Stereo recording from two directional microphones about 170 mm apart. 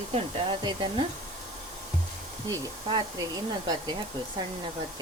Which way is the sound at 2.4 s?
20° right (ahead or behind).